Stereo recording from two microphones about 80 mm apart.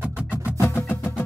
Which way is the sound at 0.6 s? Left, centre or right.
Left.